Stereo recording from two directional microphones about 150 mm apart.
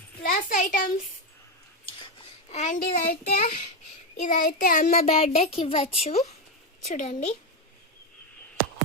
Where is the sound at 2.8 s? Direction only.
70° left (ahead or behind).